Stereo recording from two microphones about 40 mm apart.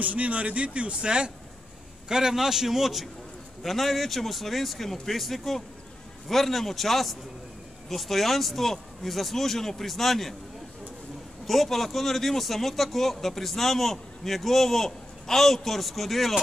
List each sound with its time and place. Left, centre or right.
0.0 s a man's voice: right
2.0 s a man's voice: centre
11.4 s a man's voice: centre